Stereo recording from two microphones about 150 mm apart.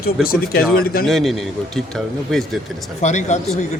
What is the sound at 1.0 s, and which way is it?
Speech, centre (ahead or behind).